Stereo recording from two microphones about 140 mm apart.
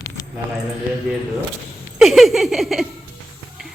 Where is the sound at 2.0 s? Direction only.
Centre (ahead or behind).